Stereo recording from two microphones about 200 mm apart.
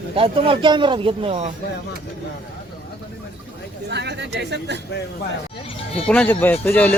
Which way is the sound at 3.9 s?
60° right (ahead or behind).